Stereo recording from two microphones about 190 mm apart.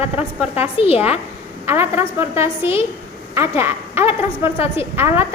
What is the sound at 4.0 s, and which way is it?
A woman's voice, 30° left (ahead or behind).